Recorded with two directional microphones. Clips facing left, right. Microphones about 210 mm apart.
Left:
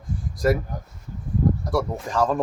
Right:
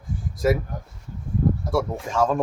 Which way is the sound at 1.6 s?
Centre (ahead or behind).